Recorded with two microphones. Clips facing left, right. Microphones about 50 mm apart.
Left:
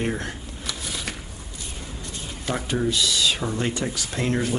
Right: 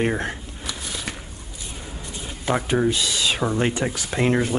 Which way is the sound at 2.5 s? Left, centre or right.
Right.